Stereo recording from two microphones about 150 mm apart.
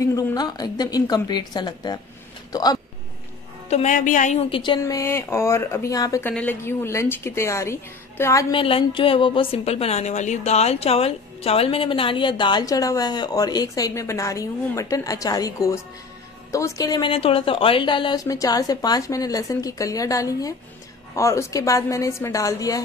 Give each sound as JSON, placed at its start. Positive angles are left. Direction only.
{"t": 0.0, "sound": "a woman's voice", "side_deg": 20}
{"t": 3.7, "sound": "a woman's voice", "side_deg": 55}
{"t": 4.5, "sound": "a woman's voice", "side_deg": 30}
{"t": 6.3, "sound": "a woman's voice", "side_deg": 10}
{"t": 8.5, "sound": "a woman's voice", "side_deg": 35}
{"t": 17.1, "sound": "a woman's voice", "side_deg": 40}